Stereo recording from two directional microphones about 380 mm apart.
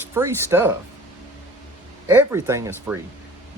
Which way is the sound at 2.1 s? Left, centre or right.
Centre.